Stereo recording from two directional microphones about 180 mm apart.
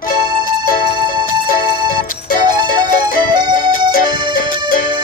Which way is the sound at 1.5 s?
50° left (ahead or behind).